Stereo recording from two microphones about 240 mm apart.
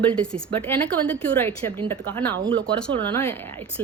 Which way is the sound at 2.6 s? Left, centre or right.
Centre.